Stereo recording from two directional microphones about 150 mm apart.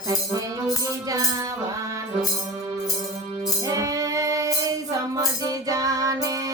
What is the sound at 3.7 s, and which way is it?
Music, 20° right (ahead or behind).